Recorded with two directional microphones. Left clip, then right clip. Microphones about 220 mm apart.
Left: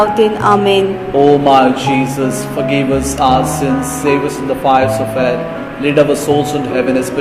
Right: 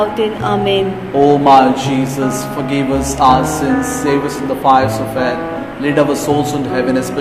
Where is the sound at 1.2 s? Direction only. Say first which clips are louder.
Right 1 dB; 5° right (ahead or behind).